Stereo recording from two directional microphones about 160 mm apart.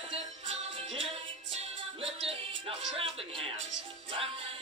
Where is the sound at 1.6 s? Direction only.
35° right (ahead or behind).